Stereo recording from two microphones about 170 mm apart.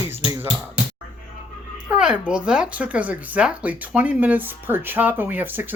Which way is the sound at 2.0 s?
5° right (ahead or behind).